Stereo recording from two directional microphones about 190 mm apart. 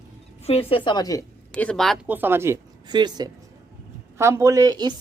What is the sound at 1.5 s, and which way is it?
Speech, 5° left (ahead or behind).